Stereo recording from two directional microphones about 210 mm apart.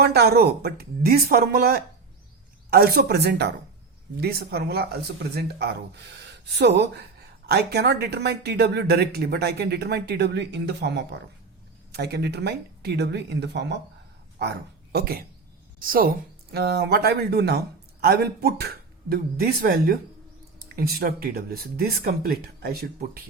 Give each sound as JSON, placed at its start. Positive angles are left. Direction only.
{"t": 0.0, "sound": "speech", "side_deg": -50}
{"t": 14.9, "sound": "speech", "side_deg": -45}